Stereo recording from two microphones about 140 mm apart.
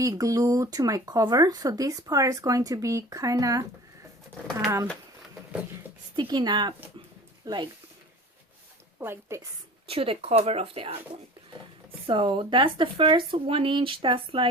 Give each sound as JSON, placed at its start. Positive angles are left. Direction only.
{"t": 0.0, "sound": "speech", "side_deg": -25}
{"t": 6.1, "sound": "speech", "side_deg": -30}
{"t": 9.0, "sound": "speech", "side_deg": -20}
{"t": 9.9, "sound": "speech", "side_deg": -40}
{"t": 12.0, "sound": "speech", "side_deg": -40}